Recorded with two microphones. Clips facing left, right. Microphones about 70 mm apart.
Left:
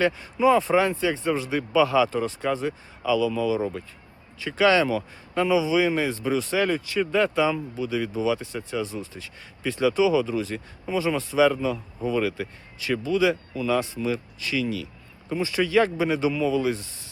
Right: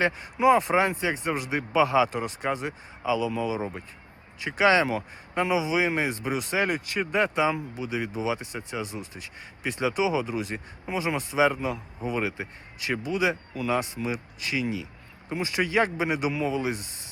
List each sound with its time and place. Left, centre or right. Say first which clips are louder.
0.3 s speech: left 1 dB; right